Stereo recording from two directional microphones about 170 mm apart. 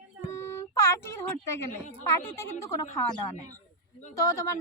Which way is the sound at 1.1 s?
15° left (ahead or behind).